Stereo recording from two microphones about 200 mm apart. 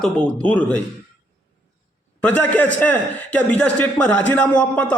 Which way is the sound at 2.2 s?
10° left (ahead or behind).